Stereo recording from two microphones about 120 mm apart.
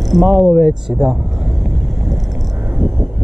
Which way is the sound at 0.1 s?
Centre (ahead or behind).